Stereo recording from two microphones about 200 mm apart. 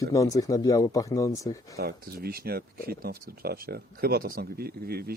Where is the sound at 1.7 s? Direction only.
50° right (ahead or behind).